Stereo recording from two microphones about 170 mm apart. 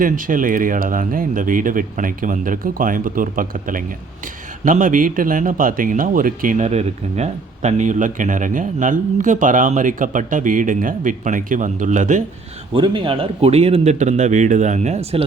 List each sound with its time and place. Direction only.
0.0 s a man's voice: 50° right (ahead or behind)
12.7 s speech: 30° right (ahead or behind)